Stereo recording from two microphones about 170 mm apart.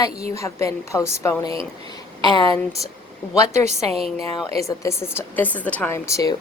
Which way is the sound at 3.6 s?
40° right (ahead or behind).